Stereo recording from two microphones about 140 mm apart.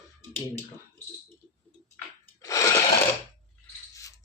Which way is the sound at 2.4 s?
25° left (ahead or behind).